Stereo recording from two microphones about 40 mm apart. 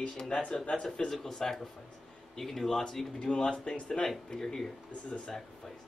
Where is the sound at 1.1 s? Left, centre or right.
Centre.